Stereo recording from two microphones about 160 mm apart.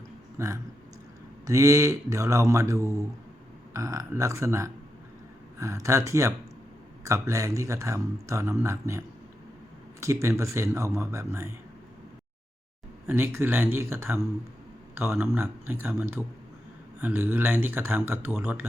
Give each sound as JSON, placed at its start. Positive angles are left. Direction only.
{"t": 0.3, "sound": "speech", "side_deg": -20}
{"t": 13.1, "sound": "speech", "side_deg": -15}